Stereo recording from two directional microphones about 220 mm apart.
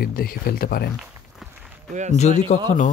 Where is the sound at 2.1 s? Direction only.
30° left (ahead or behind).